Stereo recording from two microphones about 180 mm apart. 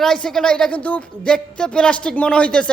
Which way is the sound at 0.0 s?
Centre (ahead or behind).